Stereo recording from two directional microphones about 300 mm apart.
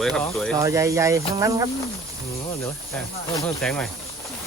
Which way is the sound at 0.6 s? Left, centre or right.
Centre.